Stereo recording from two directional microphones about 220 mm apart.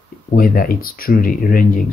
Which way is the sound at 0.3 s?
40° left (ahead or behind).